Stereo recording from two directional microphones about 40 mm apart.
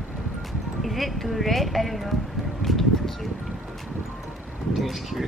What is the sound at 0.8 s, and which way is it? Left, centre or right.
Speech, centre.